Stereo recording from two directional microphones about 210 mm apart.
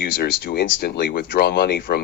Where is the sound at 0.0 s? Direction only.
50° left (ahead or behind).